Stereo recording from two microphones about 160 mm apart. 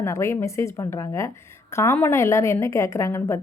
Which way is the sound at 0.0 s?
20° left (ahead or behind).